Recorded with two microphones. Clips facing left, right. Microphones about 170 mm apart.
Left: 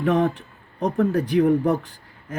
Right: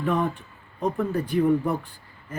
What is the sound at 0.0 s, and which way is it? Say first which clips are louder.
Speech: left 5 dB; 80° left.